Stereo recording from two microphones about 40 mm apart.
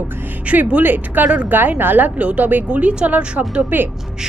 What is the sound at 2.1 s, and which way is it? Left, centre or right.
A woman's voice, right.